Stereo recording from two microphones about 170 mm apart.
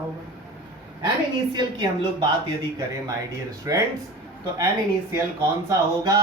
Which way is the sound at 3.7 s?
20° right (ahead or behind).